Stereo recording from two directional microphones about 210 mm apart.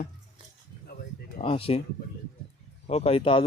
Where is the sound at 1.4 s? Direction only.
25° left (ahead or behind).